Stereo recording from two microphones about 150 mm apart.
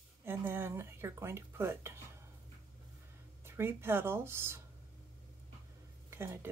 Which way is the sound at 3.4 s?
15° right (ahead or behind).